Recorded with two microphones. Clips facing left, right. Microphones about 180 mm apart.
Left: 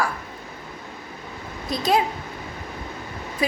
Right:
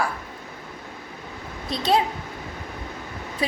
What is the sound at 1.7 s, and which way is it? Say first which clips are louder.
Speech: even; 30° right (ahead or behind).